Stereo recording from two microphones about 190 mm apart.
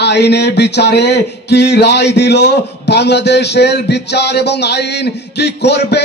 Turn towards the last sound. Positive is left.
turn(degrees=60)  # may be behind; listen again after turning